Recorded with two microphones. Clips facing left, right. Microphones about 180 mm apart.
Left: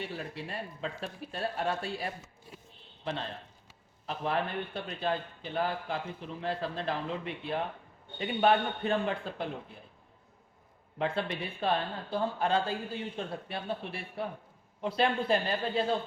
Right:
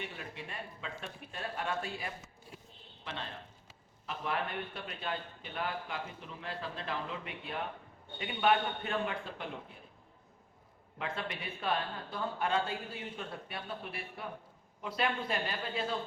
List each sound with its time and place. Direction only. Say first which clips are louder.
0.0 s speech: left 5 dB; 35° left (ahead or behind)
10.9 s speech: left 7 dB; 30° left (ahead or behind)